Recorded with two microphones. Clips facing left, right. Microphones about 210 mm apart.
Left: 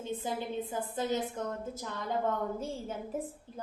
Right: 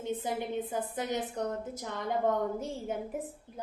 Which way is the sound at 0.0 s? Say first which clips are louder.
Right 2 dB; 20° right (ahead or behind).